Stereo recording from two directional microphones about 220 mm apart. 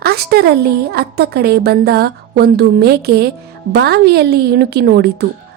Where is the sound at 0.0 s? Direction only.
45° right (ahead or behind).